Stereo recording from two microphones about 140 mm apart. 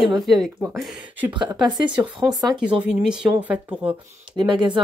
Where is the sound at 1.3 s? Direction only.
30° right (ahead or behind).